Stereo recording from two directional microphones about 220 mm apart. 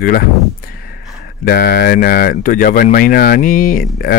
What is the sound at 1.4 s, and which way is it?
Speech, 45° left (ahead or behind).